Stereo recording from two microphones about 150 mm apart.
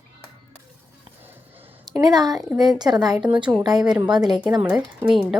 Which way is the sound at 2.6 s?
25° right (ahead or behind).